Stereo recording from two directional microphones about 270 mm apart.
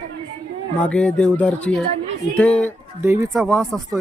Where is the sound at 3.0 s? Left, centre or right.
Centre.